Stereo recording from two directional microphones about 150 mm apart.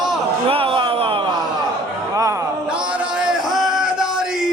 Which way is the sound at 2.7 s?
5° right (ahead or behind).